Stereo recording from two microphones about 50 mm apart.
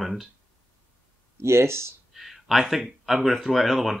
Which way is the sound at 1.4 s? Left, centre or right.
Right.